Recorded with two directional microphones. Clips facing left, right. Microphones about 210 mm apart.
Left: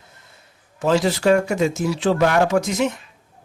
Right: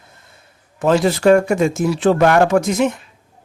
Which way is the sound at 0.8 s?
55° right (ahead or behind).